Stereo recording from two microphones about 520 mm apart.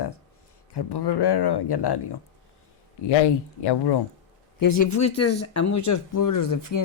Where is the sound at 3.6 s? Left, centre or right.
Left.